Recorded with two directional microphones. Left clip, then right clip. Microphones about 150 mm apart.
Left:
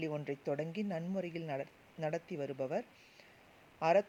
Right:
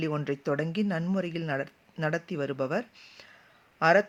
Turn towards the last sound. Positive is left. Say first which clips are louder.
# right 8 dB
turn(degrees=15)  # may be behind; listen again after turning